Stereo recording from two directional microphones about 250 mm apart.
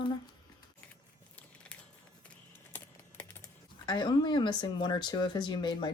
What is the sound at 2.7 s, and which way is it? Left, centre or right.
Typing, centre.